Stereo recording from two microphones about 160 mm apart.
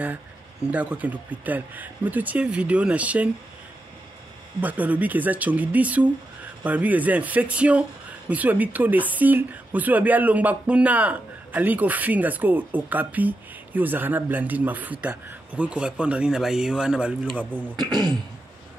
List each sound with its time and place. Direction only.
0.7 s a woman's voice: 10° right (ahead or behind)
4.6 s a woman's voice: 10° right (ahead or behind)
17.7 s speech: 25° right (ahead or behind)